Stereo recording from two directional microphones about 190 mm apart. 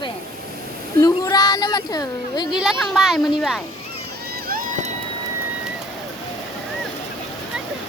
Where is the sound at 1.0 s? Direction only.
20° left (ahead or behind).